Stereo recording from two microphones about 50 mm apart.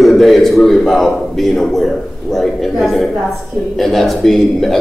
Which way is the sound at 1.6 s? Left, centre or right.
Centre.